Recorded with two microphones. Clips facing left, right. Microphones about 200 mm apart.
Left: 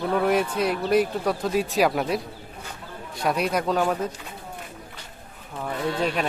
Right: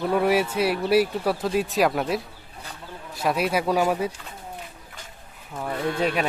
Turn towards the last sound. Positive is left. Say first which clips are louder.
# right 1 dB
turn(degrees=-5)  # may be behind; listen again after turning